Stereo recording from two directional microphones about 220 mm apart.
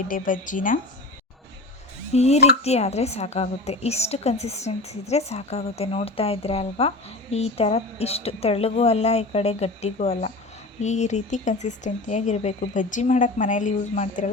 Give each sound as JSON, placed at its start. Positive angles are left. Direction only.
{"t": 0.1, "sound": "speech", "side_deg": 35}
{"t": 2.1, "sound": "a woman's voice", "side_deg": 30}